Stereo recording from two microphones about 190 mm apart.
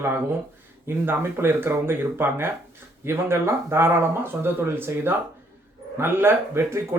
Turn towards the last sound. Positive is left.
turn(degrees=-15)  # may be behind; listen again after turning